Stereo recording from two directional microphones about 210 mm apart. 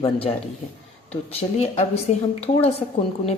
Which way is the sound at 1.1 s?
30° left (ahead or behind).